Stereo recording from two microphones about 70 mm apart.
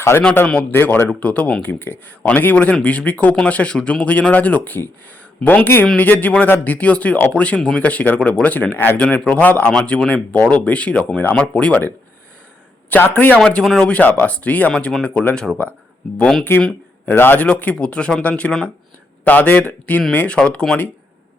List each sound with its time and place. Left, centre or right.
0.7 s speech: left
13.4 s speech: centre
16.4 s speech: left